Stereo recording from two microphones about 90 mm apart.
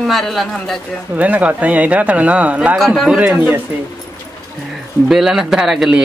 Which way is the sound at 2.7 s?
Centre (ahead or behind).